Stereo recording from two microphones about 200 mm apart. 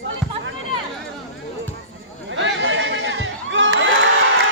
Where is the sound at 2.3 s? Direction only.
70° right (ahead or behind).